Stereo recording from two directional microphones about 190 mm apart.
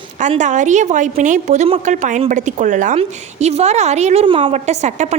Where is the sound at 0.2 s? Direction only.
40° right (ahead or behind).